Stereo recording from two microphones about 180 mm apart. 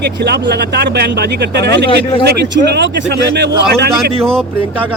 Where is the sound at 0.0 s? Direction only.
65° right (ahead or behind).